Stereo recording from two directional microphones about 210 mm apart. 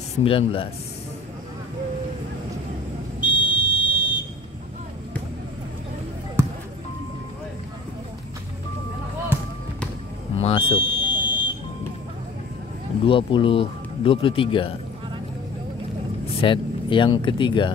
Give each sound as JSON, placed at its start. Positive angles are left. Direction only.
{"t": 0.2, "sound": "speech", "side_deg": 25}
{"t": 3.2, "sound": "buzzer", "side_deg": 25}
{"t": 10.3, "sound": "buzzer", "side_deg": 25}
{"t": 13.0, "sound": "speech", "side_deg": 25}
{"t": 16.3, "sound": "speech", "side_deg": 25}